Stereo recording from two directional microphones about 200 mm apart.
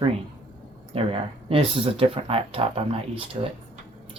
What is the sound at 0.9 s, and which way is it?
Speech, 30° right (ahead or behind).